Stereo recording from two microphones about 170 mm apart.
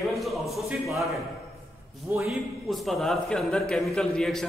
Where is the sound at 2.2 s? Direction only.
Centre (ahead or behind).